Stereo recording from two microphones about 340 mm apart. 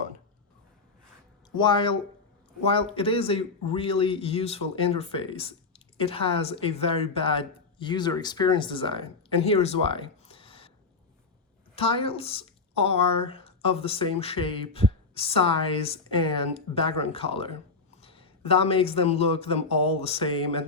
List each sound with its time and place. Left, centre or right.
1.5 s speech: centre
11.7 s speech: centre